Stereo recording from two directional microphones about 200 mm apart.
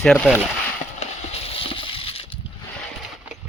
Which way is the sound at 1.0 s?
30° left (ahead or behind).